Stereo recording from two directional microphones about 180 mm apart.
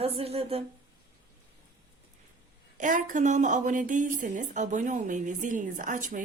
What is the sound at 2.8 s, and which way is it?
Speech, 45° right (ahead or behind).